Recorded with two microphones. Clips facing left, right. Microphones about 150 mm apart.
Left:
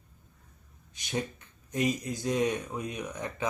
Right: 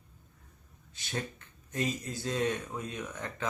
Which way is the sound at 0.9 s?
15° left (ahead or behind).